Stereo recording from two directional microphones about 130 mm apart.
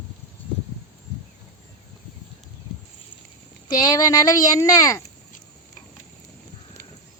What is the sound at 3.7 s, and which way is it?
A child's voice, 25° left (ahead or behind).